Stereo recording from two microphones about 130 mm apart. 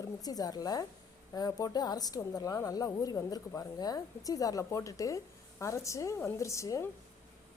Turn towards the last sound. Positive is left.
turn(degrees=25)  # may be behind; listen again after turning